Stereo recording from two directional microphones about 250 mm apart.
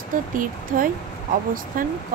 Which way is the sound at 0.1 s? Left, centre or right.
Right.